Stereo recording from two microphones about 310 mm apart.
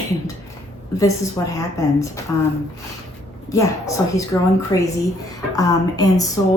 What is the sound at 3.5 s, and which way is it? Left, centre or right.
A woman's voice, centre.